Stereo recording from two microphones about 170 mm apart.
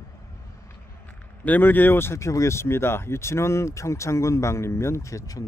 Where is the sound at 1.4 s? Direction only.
10° left (ahead or behind).